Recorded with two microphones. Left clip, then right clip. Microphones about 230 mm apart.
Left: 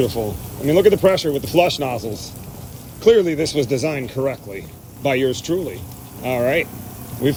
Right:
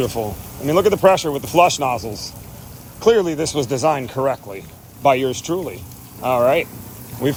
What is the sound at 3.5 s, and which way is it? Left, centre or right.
Speech, right.